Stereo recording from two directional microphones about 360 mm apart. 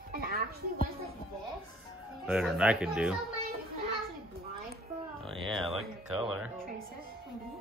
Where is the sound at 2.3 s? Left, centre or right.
Centre.